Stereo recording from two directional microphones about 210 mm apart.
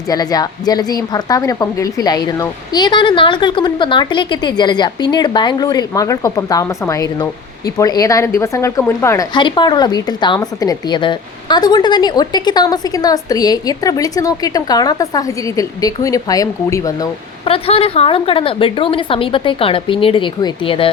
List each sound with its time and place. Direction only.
0.1 s a woman's voice: 20° left (ahead or behind)